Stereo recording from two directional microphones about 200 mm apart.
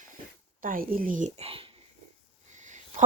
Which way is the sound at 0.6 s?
45° right (ahead or behind).